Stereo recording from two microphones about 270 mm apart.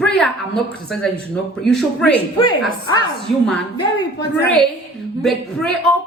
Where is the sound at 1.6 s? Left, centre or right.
Centre.